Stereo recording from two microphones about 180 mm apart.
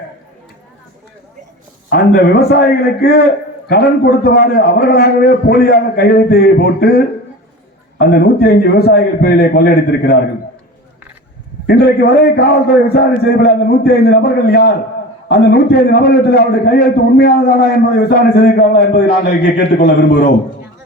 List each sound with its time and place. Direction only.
1.9 s a man's voice: 60° left (ahead or behind)
11.6 s a man's voice: 60° left (ahead or behind)